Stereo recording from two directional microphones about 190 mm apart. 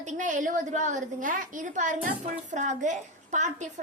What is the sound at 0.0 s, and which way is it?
A woman's voice, 40° right (ahead or behind).